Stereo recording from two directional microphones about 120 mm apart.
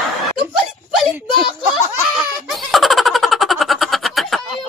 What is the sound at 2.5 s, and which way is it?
Snicker, centre (ahead or behind).